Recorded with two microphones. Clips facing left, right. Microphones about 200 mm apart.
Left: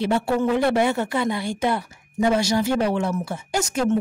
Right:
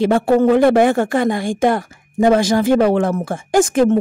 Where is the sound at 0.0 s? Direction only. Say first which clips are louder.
Right 8 dB; 50° right (ahead or behind).